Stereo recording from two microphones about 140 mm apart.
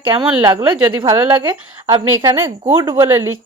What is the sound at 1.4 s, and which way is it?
A woman's voice, 40° right (ahead or behind).